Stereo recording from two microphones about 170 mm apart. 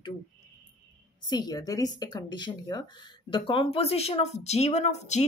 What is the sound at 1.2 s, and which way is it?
Speech, 25° left (ahead or behind).